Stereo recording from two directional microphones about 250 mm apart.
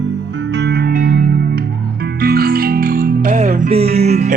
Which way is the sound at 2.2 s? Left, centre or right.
Right.